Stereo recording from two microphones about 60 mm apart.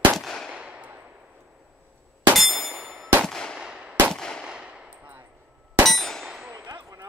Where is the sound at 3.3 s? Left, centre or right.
Centre.